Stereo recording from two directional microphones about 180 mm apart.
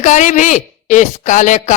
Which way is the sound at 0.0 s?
40° left (ahead or behind).